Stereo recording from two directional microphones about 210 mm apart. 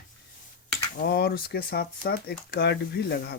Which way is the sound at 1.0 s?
50° left (ahead or behind).